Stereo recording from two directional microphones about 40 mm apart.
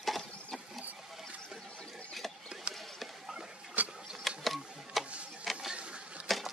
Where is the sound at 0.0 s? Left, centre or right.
Centre.